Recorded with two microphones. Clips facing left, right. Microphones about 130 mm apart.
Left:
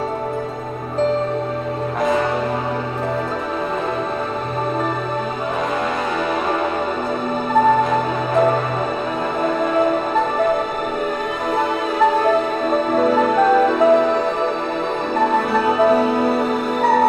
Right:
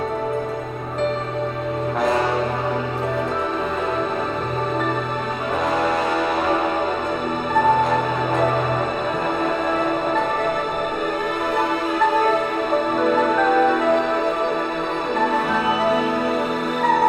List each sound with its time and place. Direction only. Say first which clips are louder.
13.1 s music: left 2 dB; 35° left (ahead or behind)